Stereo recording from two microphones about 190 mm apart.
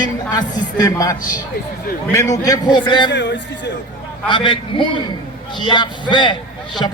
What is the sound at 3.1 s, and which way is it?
Speech, 65° left (ahead or behind).